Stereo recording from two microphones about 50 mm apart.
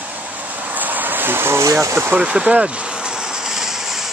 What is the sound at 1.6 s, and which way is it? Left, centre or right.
Speech, right.